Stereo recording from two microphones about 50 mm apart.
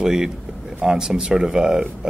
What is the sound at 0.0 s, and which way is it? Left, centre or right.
Speech, centre.